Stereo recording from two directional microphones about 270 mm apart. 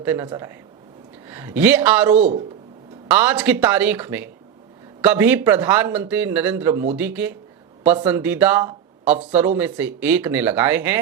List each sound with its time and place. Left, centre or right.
0.0 s speech: centre
2.1 s speech: right
3.1 s speech: centre